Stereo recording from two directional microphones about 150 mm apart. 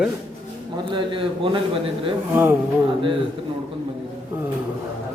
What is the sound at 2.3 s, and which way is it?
Speech, 15° right (ahead or behind).